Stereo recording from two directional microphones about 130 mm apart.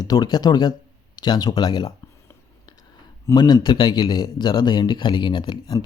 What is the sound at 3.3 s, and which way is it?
Speech, 35° left (ahead or behind).